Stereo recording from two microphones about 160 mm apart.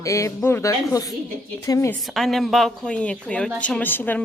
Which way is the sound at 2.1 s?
Centre (ahead or behind).